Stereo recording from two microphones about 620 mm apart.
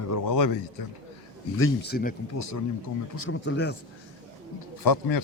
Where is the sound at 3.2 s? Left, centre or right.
Centre.